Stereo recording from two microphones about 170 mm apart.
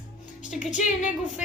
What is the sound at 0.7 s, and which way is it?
Speech, 45° left (ahead or behind).